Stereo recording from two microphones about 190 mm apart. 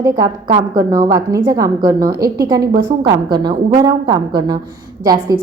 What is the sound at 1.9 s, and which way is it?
Speech, 50° right (ahead or behind).